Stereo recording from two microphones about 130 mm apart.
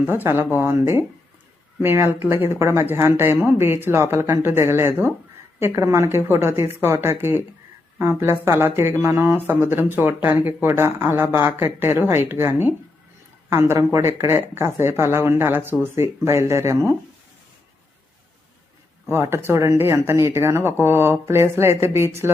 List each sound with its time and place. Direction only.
0.0 s speech: 15° right (ahead or behind)
19.1 s speech: 20° right (ahead or behind)